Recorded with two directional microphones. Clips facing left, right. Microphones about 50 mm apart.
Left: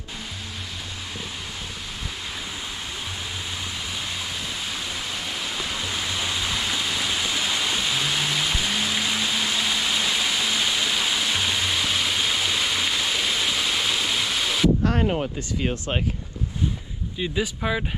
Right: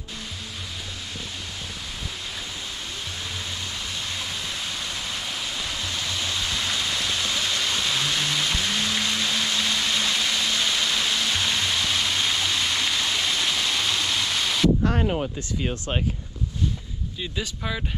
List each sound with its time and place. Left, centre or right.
4.6 s waterfall: centre
14.9 s a sound: left
17.2 s speech: centre